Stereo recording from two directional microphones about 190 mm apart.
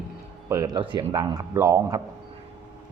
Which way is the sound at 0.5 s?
20° right (ahead or behind).